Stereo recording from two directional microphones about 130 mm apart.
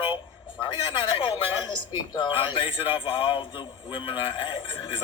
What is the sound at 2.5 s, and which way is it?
A man's voice, 40° left (ahead or behind).